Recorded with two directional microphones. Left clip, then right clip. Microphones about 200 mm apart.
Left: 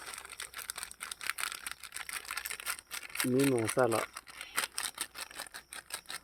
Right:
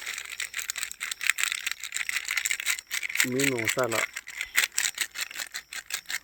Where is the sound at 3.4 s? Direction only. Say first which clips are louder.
Left 2 dB; 10° left (ahead or behind).